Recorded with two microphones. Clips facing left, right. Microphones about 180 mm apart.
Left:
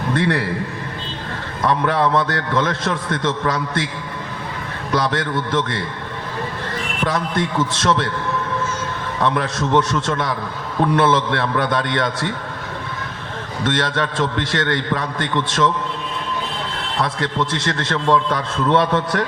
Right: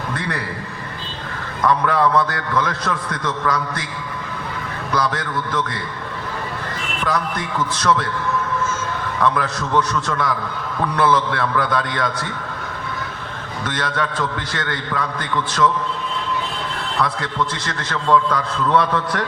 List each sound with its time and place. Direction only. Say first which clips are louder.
0.2 s a man's voice: left 7 dB; 25° left (ahead or behind)
1.6 s a man's voice: even; 20° left (ahead or behind)
4.9 s a man's voice: left 2 dB; 25° left (ahead or behind)
7.0 s a man's voice: left 2 dB; 25° left (ahead or behind)
9.2 s a man's voice: left 1 dB; 25° left (ahead or behind)
13.7 s a man's voice: left 3 dB; 25° left (ahead or behind)
17.0 s a man's voice: left 1 dB; 25° left (ahead or behind)